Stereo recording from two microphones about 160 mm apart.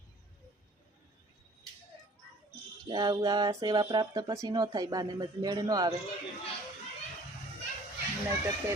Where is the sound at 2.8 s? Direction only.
30° right (ahead or behind).